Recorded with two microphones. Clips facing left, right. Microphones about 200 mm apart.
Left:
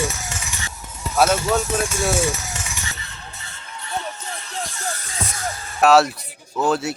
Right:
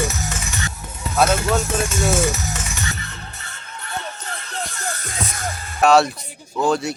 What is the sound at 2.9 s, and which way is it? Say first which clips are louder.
Music: right 3 dB; 55° right (ahead or behind).